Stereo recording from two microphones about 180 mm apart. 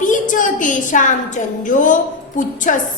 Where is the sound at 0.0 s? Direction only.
45° left (ahead or behind).